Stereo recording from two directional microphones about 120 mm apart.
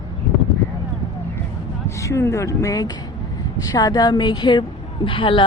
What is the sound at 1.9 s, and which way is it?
A woman's voice, 25° left (ahead or behind).